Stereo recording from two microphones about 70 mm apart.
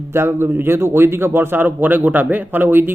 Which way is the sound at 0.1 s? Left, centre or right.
Right.